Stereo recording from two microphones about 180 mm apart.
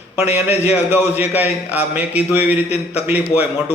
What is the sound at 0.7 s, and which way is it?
A man's voice, 10° right (ahead or behind).